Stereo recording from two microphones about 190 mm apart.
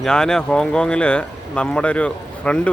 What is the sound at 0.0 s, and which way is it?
Speech, 5° left (ahead or behind).